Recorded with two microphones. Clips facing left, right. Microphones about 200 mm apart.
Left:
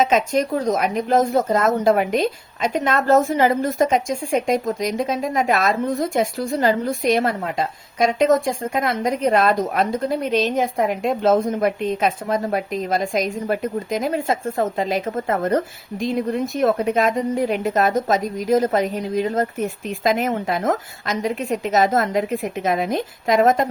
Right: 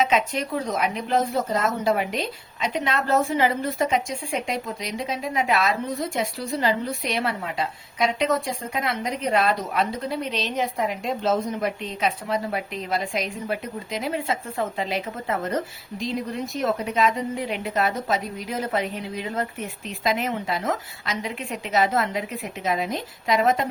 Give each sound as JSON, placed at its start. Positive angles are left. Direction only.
{"t": 0.0, "sound": "speech", "side_deg": 45}